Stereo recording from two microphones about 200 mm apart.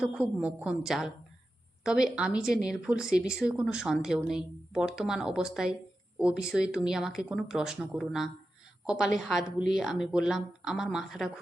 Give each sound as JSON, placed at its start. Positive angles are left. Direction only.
{"t": 0.0, "sound": "speech", "side_deg": -5}